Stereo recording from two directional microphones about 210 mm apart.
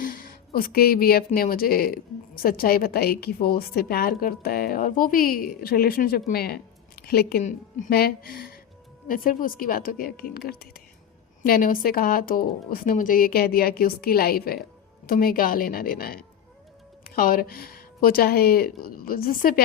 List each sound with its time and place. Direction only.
0.0 s speech: 40° left (ahead or behind)